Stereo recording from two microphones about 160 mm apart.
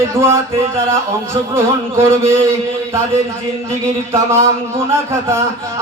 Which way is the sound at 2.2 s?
15° right (ahead or behind).